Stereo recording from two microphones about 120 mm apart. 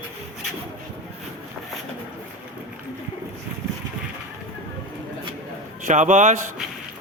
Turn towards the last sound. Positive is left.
turn(degrees=-90)